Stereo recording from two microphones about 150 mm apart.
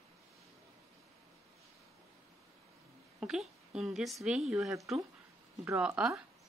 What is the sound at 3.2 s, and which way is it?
Speech, 5° right (ahead or behind).